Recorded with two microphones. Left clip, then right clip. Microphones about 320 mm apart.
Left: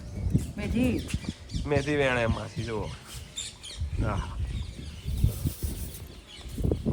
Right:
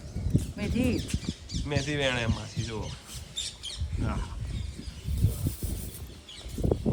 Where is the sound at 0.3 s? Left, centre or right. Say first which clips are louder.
Left 1 dB; centre.